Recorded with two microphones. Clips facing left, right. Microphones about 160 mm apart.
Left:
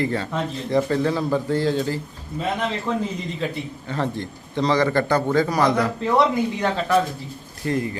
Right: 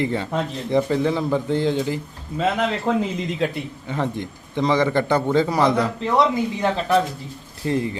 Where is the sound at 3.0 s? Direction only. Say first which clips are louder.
Right 3 dB; 90° right.